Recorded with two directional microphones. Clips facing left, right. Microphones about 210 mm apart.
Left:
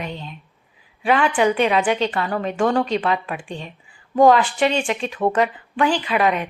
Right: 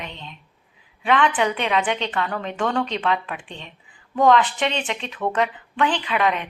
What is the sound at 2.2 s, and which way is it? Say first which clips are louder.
A woman's voice: left 5 dB; 40° left (ahead or behind).